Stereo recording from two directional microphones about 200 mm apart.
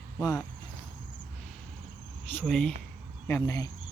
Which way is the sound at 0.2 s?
15° left (ahead or behind).